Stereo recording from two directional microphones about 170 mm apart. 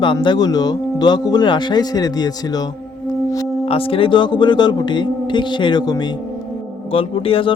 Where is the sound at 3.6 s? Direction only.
35° left (ahead or behind).